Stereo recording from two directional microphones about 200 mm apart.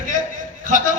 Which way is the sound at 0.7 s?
40° right (ahead or behind).